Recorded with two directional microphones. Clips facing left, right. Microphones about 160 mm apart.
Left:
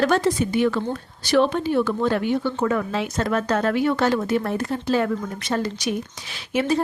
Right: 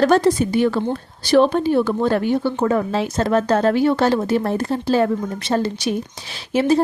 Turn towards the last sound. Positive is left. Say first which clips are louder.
# right 5 dB
turn(degrees=-30)  # may be behind; listen again after turning